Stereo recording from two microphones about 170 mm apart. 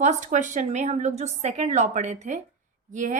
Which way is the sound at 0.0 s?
45° right (ahead or behind).